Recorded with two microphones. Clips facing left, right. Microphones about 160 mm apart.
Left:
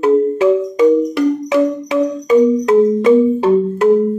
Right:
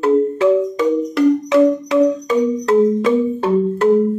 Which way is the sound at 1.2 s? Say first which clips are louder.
Right 1 dB; 5° left (ahead or behind).